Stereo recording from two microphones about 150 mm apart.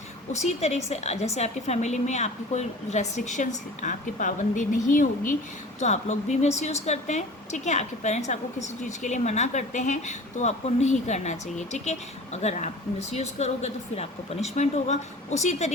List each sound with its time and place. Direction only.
0.3 s a woman's voice: 50° left (ahead or behind)
5.8 s a woman's voice: 50° left (ahead or behind)